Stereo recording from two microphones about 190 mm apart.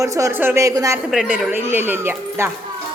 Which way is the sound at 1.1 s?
Centre (ahead or behind).